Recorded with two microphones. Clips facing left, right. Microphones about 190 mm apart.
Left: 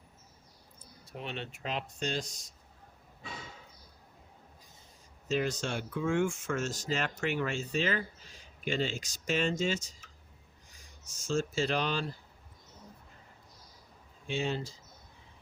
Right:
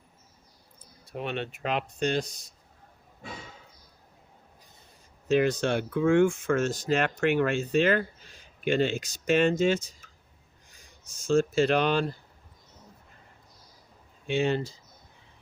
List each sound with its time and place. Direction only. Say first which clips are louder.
1.1 s speech: right 7 dB; 60° right (ahead or behind)
5.3 s speech: right 8 dB; 60° right (ahead or behind)
11.0 s speech: right 8 dB; 60° right (ahead or behind)
14.3 s speech: right 7 dB; 65° right (ahead or behind)